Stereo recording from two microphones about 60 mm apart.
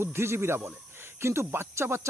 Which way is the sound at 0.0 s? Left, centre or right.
Right.